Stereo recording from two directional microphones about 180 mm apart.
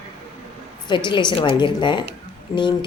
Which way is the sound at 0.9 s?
25° left (ahead or behind).